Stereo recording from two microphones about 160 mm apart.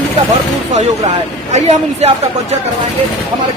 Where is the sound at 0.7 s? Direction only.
40° right (ahead or behind).